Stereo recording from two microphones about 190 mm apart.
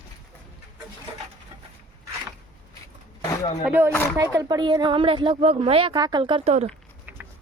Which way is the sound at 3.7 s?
10° right (ahead or behind).